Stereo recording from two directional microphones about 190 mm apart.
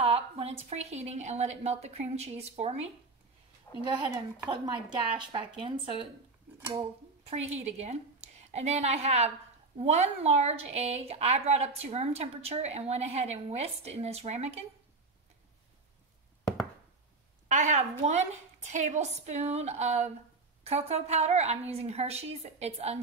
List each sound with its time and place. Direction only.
0.0 s speech: 30° right (ahead or behind)
3.8 s speech: 25° right (ahead or behind)
17.5 s speech: 40° right (ahead or behind)